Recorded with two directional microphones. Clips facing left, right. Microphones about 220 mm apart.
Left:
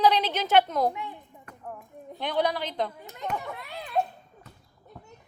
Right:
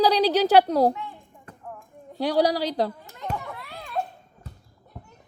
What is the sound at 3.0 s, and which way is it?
Speech, 20° left (ahead or behind).